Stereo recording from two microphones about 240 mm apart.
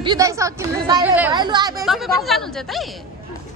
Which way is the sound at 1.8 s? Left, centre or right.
Centre.